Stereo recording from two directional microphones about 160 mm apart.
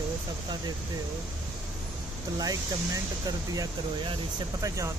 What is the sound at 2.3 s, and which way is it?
Speech, 25° right (ahead or behind).